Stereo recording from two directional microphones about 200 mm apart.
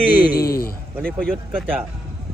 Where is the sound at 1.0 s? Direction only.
5° left (ahead or behind).